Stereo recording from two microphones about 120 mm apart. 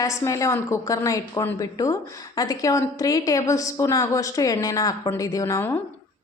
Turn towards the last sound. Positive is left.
turn(degrees=25)  # may be behind; listen again after turning